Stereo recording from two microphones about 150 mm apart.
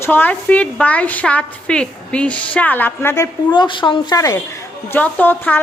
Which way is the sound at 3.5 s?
30° left (ahead or behind).